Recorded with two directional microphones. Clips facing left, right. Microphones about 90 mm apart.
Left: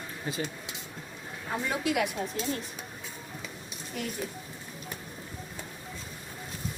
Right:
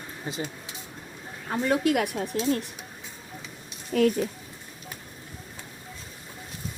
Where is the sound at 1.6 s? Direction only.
45° right (ahead or behind); by 2.6 s 65° right (ahead or behind).